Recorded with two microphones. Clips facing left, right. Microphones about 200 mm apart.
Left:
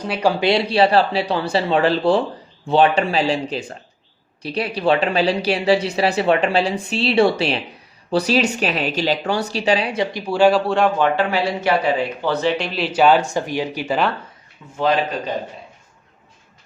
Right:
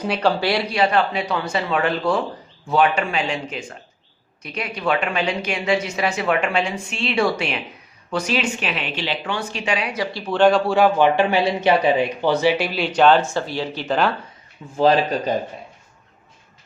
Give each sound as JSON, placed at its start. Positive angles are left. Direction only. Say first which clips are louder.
{"t": 0.2, "sound": "speech", "louder": "left 5 dB", "side_deg": 15}
{"t": 10.9, "sound": "speech", "louder": "right 2 dB", "side_deg": -15}
{"t": 14.6, "sound": "speech", "louder": "right 4 dB", "side_deg": -30}